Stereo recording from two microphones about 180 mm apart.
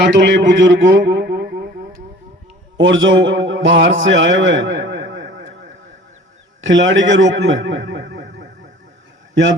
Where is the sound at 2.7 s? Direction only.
90° right.